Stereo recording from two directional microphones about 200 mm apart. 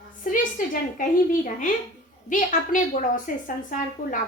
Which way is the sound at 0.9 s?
40° left (ahead or behind).